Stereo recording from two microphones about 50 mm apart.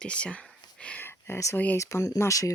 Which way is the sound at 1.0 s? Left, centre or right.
Left.